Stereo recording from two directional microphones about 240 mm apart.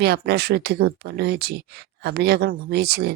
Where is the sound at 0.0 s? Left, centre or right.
Right.